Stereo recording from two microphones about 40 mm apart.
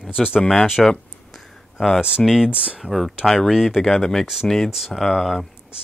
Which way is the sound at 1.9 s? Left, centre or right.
Right.